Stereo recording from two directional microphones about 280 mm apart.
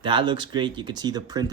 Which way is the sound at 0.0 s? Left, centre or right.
Centre.